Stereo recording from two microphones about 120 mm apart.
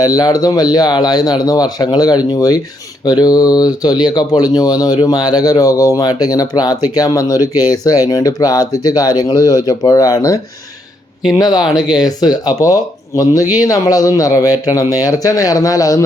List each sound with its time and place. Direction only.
0.0 s speech: 30° left (ahead or behind)